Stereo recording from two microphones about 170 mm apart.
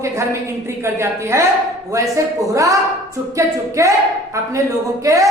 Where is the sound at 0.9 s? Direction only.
15° right (ahead or behind).